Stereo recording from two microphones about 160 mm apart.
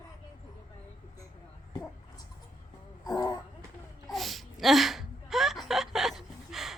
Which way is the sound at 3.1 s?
20° left (ahead or behind).